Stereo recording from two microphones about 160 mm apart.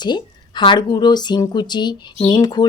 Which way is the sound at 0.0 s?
30° left (ahead or behind).